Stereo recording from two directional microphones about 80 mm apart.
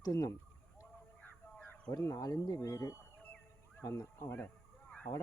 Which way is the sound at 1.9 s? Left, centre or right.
Left.